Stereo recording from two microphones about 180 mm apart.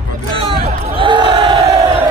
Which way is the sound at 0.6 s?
25° right (ahead or behind).